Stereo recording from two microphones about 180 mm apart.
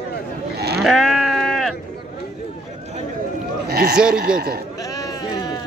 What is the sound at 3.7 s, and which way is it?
Speech, 60° right (ahead or behind).